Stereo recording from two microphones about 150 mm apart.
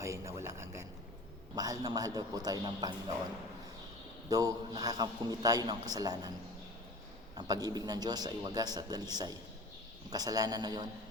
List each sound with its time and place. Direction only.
0.0 s a sound: 20° right (ahead or behind)
1.5 s a man's voice: 25° right (ahead or behind)
4.3 s a man's voice: 25° right (ahead or behind)
7.3 s a man's voice: 25° right (ahead or behind)